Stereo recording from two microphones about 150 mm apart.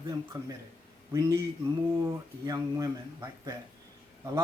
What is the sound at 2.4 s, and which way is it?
Speech, 25° right (ahead or behind).